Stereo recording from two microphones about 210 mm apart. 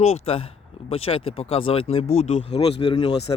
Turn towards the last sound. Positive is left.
turn(degrees=30)  # may be behind; listen again after turning